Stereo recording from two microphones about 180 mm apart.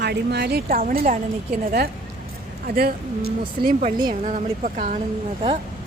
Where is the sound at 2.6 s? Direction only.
55° right (ahead or behind).